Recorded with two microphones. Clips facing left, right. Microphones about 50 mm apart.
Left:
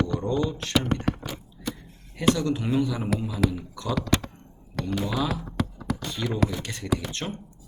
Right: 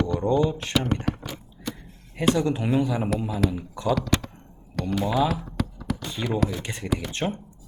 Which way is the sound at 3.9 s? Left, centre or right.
Centre.